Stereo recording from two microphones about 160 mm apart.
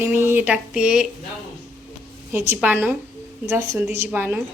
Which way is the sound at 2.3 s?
15° right (ahead or behind).